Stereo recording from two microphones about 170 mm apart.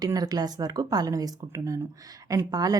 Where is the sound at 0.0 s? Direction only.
20° right (ahead or behind).